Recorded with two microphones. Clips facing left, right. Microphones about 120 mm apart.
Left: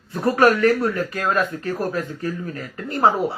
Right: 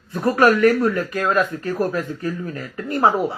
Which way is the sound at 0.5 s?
30° left (ahead or behind).